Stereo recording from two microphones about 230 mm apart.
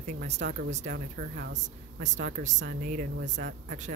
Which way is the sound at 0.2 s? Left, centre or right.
Right.